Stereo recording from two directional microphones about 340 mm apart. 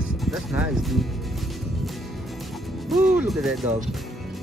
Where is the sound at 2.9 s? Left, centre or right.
Centre.